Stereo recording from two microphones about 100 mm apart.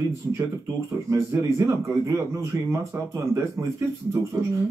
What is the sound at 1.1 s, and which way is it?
A man's voice, 25° right (ahead or behind).